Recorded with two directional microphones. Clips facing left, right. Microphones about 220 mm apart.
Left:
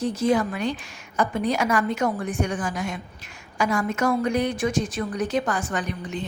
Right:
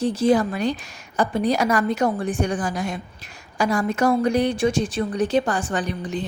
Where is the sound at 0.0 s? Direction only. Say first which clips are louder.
Right 3 dB; 30° right (ahead or behind).